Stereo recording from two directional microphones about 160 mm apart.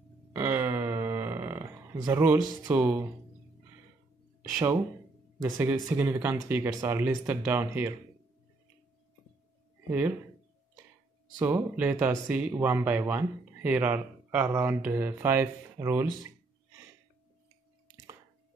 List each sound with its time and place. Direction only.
0.3 s a sound: 10° right (ahead or behind)
2.7 s speech: 10° right (ahead or behind)
4.4 s speech: 10° right (ahead or behind)
9.8 s speech: 10° right (ahead or behind)
11.3 s speech: 10° right (ahead or behind)